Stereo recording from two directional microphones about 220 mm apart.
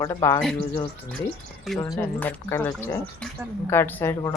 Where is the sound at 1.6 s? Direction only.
Centre (ahead or behind).